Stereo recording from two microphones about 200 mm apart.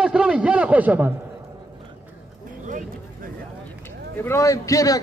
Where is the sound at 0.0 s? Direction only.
5° right (ahead or behind).